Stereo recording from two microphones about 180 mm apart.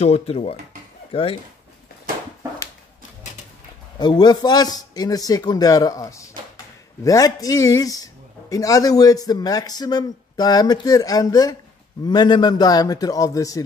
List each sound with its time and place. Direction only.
0.0 s speech: 35° left (ahead or behind)
4.0 s speech: 25° left (ahead or behind)